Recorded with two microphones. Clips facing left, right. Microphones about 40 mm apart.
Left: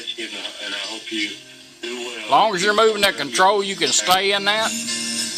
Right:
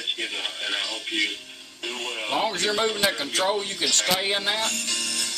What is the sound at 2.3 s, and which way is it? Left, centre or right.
A man's voice, left.